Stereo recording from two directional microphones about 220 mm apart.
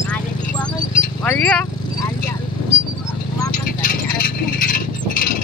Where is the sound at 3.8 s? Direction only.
40° left (ahead or behind).